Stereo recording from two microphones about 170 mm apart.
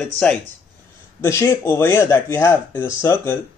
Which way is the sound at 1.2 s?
15° left (ahead or behind).